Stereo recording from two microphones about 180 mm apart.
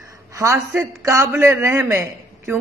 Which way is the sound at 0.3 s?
15° right (ahead or behind).